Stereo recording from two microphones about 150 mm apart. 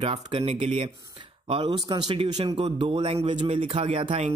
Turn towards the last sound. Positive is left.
turn(degrees=-40)  # may be behind; listen again after turning